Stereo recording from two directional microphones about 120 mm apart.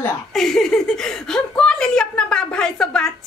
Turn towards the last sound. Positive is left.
turn(degrees=5)  # may be behind; listen again after turning